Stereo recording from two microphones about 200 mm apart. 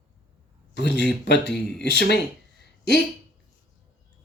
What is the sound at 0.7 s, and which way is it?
Speech, 60° left (ahead or behind).